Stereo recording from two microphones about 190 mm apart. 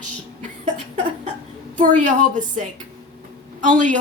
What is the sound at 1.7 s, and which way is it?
Speech, 40° right (ahead or behind).